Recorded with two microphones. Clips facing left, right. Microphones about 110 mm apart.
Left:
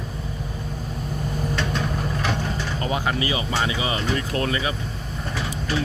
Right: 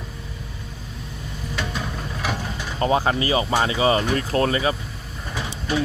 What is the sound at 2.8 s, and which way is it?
Speech, 35° right (ahead or behind).